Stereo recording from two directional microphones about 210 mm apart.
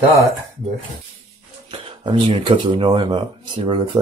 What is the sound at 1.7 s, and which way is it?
Speech, 25° right (ahead or behind).